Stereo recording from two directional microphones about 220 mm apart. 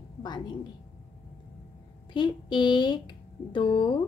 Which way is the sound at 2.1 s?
20° left (ahead or behind).